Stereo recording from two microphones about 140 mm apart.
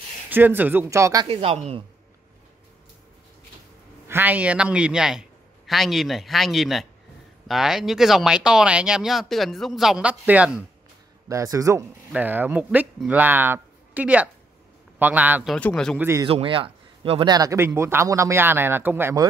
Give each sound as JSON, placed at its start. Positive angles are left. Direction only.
{"t": 0.3, "sound": "speech", "side_deg": -15}
{"t": 1.2, "sound": "speech", "side_deg": -45}
{"t": 4.1, "sound": "speech", "side_deg": -15}
{"t": 11.2, "sound": "speech", "side_deg": -25}
{"t": 12.1, "sound": "speech", "side_deg": -10}
{"t": 15.4, "sound": "speech", "side_deg": 5}
{"t": 16.0, "sound": "speech", "side_deg": -20}
{"t": 16.3, "sound": "speech", "side_deg": -40}